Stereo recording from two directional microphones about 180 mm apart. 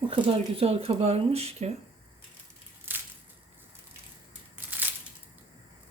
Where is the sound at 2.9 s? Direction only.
10° right (ahead or behind).